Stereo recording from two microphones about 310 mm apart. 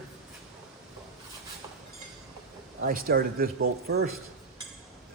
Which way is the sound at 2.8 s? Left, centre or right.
Right.